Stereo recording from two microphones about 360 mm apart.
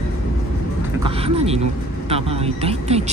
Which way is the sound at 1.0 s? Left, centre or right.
Centre.